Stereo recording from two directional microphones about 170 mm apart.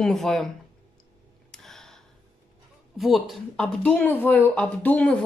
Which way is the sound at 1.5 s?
5° left (ahead or behind).